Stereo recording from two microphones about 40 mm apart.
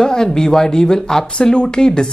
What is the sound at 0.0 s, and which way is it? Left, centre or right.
Speech, centre.